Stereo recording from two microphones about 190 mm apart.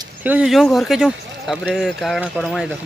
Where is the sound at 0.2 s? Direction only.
5° right (ahead or behind).